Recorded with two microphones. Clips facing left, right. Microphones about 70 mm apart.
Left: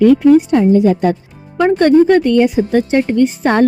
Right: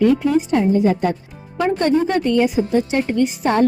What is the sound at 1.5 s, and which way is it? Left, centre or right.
A woman's voice, left.